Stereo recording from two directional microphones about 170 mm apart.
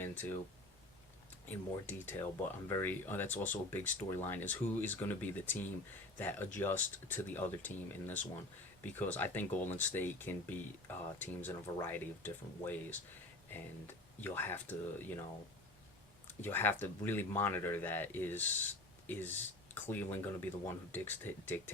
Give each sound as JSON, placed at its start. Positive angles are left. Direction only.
{"t": 0.0, "sound": "speech", "side_deg": 10}
{"t": 1.5, "sound": "speech", "side_deg": 10}
{"t": 16.4, "sound": "speech", "side_deg": 10}